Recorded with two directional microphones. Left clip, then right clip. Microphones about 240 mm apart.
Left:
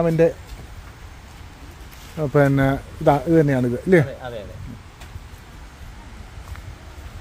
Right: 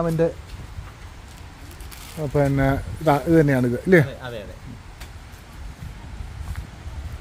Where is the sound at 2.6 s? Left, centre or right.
Centre.